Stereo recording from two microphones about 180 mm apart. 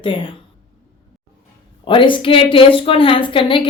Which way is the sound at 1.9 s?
30° left (ahead or behind).